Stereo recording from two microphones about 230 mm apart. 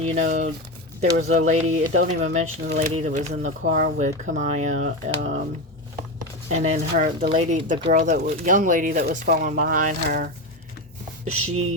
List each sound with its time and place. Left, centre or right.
0.0 s speech: right
6.5 s speech: right
11.3 s a sound: right